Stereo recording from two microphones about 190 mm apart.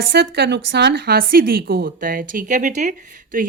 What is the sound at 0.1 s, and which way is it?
A woman's voice, 60° right (ahead or behind).